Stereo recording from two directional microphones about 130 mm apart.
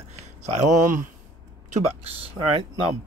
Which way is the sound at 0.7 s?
80° right.